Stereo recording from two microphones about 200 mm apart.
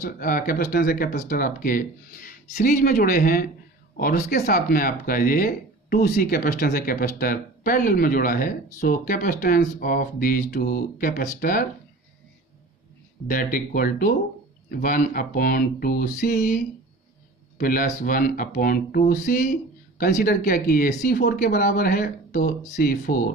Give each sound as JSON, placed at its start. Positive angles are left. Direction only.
{"t": 0.0, "sound": "speech", "side_deg": 45}
{"t": 13.3, "sound": "speech", "side_deg": 45}
{"t": 17.6, "sound": "speech", "side_deg": 45}